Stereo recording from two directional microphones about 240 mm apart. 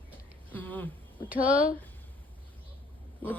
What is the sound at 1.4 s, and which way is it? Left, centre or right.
Speech, left.